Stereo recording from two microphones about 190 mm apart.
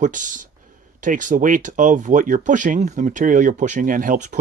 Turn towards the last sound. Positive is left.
turn(degrees=-45)  # may be behind; listen again after turning